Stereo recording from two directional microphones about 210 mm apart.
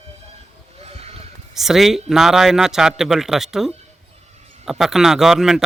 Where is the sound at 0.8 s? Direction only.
30° right (ahead or behind).